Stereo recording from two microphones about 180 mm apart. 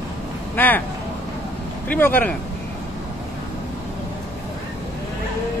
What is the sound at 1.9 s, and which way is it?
Speech, 10° left (ahead or behind).